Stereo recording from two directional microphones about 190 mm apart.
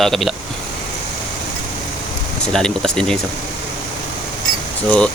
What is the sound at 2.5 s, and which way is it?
Speech, 5° left (ahead or behind).